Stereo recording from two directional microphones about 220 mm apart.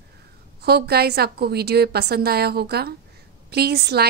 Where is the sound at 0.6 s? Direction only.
45° right (ahead or behind).